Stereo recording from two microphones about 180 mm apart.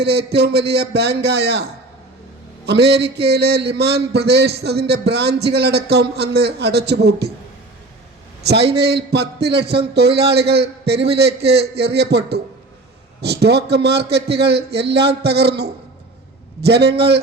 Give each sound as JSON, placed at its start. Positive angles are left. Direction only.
{"t": 0.0, "sound": "a man's voice", "side_deg": -65}
{"t": 2.6, "sound": "a man's voice", "side_deg": -65}
{"t": 8.4, "sound": "a man's voice", "side_deg": -65}